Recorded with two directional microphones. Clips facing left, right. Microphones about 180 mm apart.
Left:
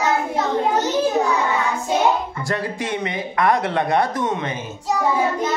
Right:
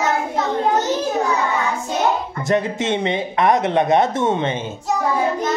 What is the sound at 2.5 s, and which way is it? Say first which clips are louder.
Speech: right 6 dB; 20° right (ahead or behind).